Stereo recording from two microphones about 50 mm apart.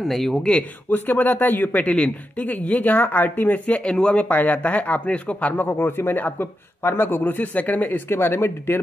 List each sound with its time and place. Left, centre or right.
0.0 s speech: centre
0.5 s speech: left
1.9 s speech: centre
2.4 s speech: left
3.8 s speech: left
4.3 s speech: left
5.7 s speech: left
8.1 s speech: left